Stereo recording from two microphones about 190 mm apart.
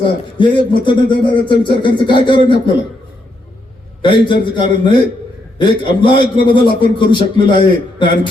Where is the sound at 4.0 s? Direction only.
25° left (ahead or behind).